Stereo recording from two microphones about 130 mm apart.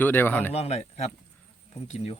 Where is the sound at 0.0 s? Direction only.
15° left (ahead or behind).